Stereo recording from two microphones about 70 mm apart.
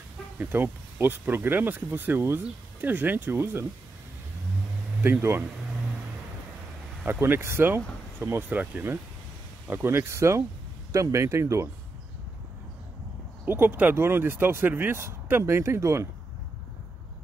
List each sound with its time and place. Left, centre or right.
0.4 s speech: right
7.1 s speech: right
9.7 s speech: right
13.5 s speech: right